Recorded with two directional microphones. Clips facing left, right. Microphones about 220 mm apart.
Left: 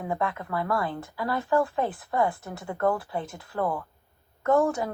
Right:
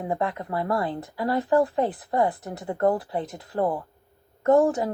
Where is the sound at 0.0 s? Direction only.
35° right (ahead or behind).